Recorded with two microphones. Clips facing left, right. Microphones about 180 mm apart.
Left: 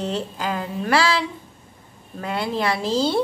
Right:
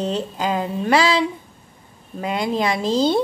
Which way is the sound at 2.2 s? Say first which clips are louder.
Right 2 dB; 15° right (ahead or behind).